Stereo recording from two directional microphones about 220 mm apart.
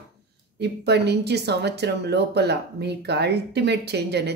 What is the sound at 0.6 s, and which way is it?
Speech, 50° right (ahead or behind).